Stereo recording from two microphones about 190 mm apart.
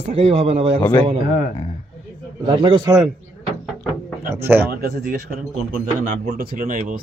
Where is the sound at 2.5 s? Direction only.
25° right (ahead or behind).